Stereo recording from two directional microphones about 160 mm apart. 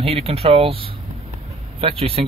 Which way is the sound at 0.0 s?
40° right (ahead or behind).